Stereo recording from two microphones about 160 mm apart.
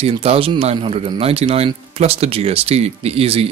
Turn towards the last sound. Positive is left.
turn(degrees=-35)  # may be behind; listen again after turning